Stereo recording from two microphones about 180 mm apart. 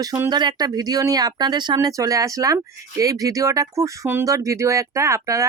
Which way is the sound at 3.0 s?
20° right (ahead or behind).